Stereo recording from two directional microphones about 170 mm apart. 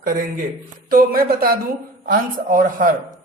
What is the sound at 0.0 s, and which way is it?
A man's voice, 55° right (ahead or behind).